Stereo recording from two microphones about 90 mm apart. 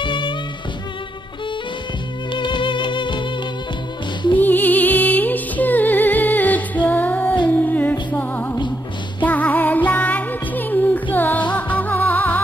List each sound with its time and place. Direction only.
0.0 s music: 65° left (ahead or behind)
2.3 s music: 60° left (ahead or behind)
4.4 s music: 20° left (ahead or behind)